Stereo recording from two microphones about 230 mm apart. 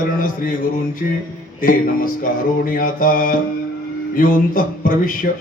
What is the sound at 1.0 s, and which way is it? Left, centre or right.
A man's voice, left.